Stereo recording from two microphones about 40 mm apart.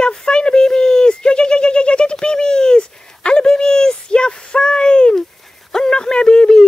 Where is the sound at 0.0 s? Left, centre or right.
Left.